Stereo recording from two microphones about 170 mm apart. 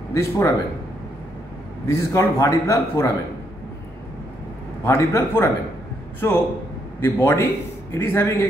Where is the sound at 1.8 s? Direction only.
15° left (ahead or behind).